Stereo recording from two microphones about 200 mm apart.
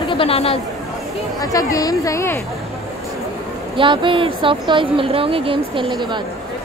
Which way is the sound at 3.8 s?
25° right (ahead or behind).